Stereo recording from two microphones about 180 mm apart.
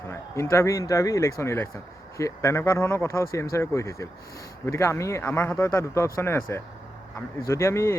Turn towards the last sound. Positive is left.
turn(degrees=15)  # may be behind; listen again after turning